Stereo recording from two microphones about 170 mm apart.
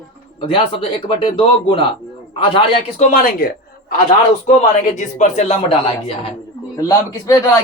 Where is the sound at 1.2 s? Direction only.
30° left (ahead or behind).